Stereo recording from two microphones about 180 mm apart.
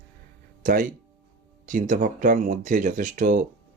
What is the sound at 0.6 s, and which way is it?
Speech, 45° right (ahead or behind).